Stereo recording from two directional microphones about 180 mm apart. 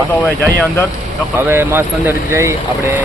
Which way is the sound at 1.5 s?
15° right (ahead or behind).